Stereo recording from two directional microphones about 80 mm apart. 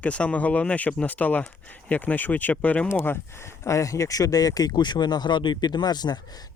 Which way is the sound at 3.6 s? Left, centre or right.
Left.